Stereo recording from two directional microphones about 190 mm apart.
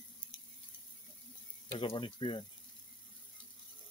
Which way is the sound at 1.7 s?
25° left (ahead or behind).